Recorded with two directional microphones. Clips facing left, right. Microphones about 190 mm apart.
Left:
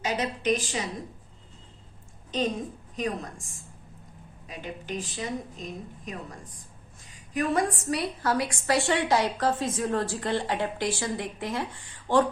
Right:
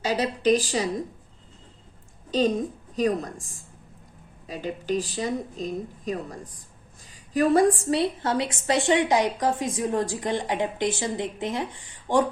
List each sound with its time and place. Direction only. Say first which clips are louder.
0.0 s a woman's voice: right 5 dB; 35° right (ahead or behind)
2.3 s a woman's voice: right 6 dB; 35° right (ahead or behind)
4.4 s a woman's voice: right 8 dB; 35° right (ahead or behind)
7.3 s a woman's voice: right 7 dB; 35° right (ahead or behind); by 12.2 s 15° right (ahead or behind)